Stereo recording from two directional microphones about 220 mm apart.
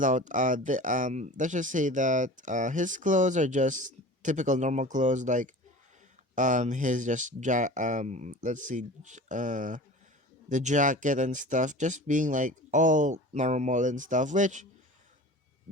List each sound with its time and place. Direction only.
0.0 s speech: 35° right (ahead or behind)